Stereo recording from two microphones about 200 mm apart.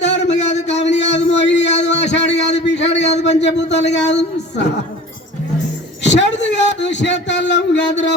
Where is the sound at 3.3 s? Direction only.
60° left (ahead or behind).